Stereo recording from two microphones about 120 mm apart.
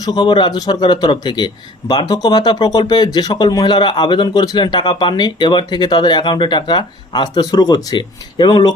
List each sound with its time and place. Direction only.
0.0 s a man's voice: 35° left (ahead or behind)